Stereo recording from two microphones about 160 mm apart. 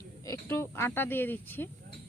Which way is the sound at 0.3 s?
15° left (ahead or behind).